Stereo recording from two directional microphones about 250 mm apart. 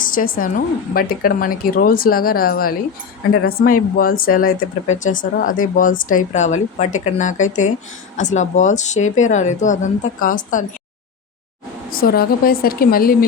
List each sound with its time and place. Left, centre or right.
0.0 s speech: left
11.9 s speech: left